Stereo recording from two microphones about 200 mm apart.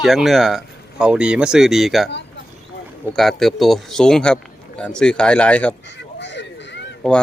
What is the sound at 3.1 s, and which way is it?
A man's voice, centre (ahead or behind).